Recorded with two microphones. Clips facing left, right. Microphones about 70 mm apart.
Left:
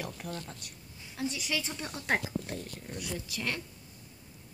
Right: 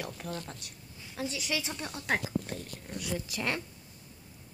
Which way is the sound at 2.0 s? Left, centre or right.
Centre.